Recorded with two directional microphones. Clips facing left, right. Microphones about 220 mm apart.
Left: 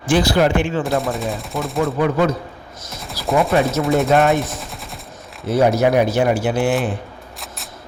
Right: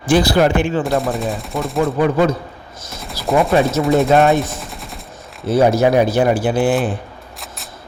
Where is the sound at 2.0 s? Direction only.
30° right (ahead or behind).